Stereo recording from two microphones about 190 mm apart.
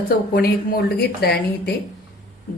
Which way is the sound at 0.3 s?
50° left (ahead or behind).